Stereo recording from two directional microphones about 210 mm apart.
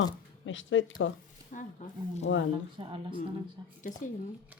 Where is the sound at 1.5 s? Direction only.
35° left (ahead or behind).